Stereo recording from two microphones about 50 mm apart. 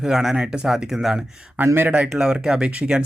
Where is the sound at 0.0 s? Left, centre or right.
Centre.